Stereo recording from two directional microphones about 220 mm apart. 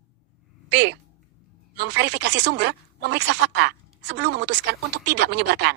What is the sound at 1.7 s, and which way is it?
Speech, 50° right (ahead or behind).